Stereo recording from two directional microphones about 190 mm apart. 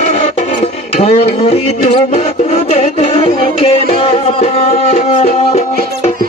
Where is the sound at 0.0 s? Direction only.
35° left (ahead or behind).